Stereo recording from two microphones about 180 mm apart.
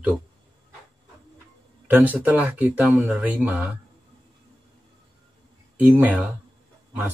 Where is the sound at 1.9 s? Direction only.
10° right (ahead or behind).